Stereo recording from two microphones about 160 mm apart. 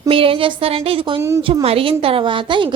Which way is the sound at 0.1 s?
35° right (ahead or behind).